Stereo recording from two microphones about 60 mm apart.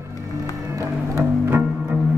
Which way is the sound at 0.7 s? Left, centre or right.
Right.